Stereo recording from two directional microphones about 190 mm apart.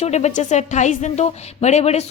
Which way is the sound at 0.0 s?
35° left (ahead or behind).